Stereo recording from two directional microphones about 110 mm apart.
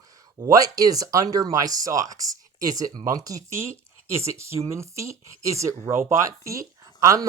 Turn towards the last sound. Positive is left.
turn(degrees=-30)  # may be behind; listen again after turning